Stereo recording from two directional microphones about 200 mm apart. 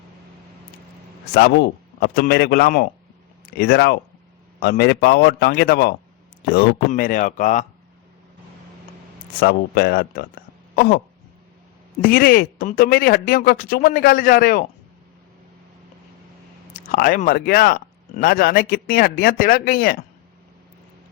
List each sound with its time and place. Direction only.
1.3 s speech: 55° left (ahead or behind)
9.4 s speech: 50° left (ahead or behind)
12.0 s speech: 50° left (ahead or behind)
16.9 s speech: 45° left (ahead or behind)